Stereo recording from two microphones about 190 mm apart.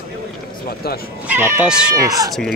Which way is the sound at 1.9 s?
20° right (ahead or behind).